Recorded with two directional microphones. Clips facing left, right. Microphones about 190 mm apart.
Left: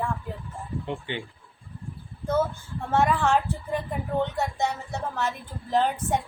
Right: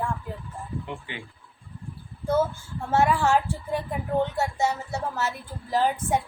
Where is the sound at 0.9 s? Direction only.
30° left (ahead or behind).